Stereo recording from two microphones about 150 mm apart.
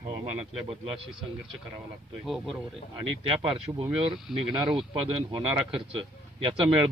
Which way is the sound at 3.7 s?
25° right (ahead or behind).